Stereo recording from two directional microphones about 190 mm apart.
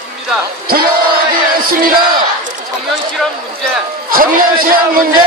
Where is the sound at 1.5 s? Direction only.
50° right (ahead or behind).